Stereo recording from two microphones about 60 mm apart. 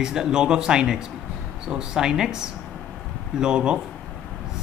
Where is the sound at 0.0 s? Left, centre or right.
Centre.